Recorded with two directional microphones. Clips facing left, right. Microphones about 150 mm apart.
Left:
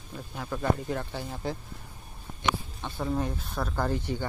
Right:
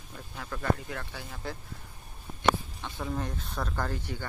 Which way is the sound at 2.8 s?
10° left (ahead or behind).